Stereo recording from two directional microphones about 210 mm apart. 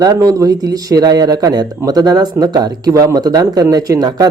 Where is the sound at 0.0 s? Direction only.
15° right (ahead or behind).